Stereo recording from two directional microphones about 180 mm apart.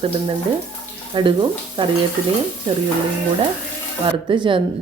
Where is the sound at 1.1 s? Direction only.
25° right (ahead or behind).